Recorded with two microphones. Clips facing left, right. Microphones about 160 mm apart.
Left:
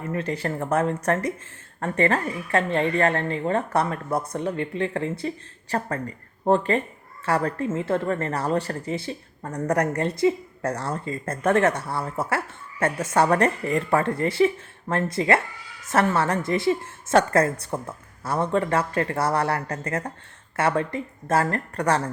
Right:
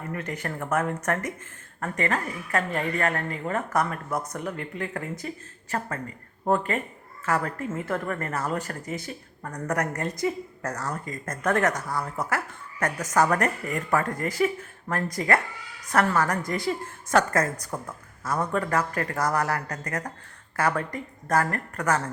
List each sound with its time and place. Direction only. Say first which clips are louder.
0.1 s a woman's voice: left 6 dB; 30° left (ahead or behind)